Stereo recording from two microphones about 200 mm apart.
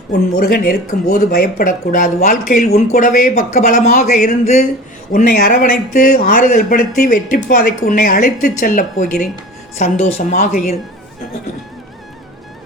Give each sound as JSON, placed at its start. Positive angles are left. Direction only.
{"t": 0.1, "sound": "speech", "side_deg": 50}
{"t": 5.1, "sound": "speech", "side_deg": 45}